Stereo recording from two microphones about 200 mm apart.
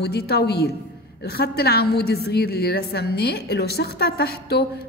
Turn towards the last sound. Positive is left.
turn(degrees=55)  # may be behind; listen again after turning